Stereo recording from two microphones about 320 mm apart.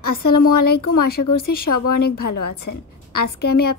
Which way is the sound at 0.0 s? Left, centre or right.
Left.